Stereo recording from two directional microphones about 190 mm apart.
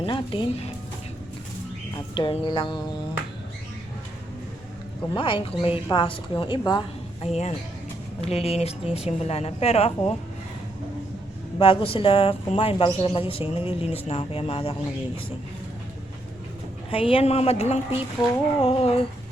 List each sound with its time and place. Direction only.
0.0 s music: 25° left (ahead or behind)
2.1 s speech: 25° left (ahead or behind)
5.1 s speech: 25° left (ahead or behind)
7.3 s a woman's voice: 35° left (ahead or behind)
11.6 s a woman's voice: 30° left (ahead or behind)
16.9 s a woman's voice: 30° left (ahead or behind)